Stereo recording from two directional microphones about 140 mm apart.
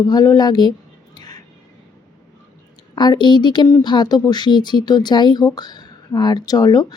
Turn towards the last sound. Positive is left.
turn(degrees=30)  # may be behind; listen again after turning